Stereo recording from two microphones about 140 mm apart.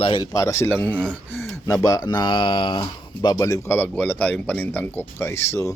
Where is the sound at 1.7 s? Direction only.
25° left (ahead or behind).